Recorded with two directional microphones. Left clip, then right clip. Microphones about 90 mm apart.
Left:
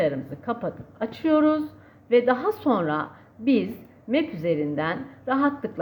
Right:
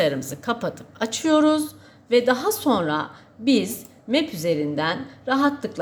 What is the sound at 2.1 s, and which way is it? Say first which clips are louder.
A woman's voice: right 1 dB; 15° right (ahead or behind).